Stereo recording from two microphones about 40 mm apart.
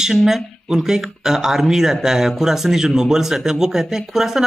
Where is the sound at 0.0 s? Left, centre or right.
Centre.